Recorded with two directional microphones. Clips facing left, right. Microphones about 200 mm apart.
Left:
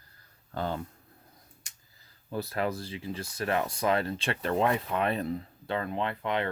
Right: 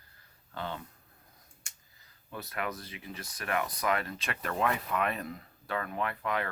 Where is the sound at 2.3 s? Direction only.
30° left (ahead or behind).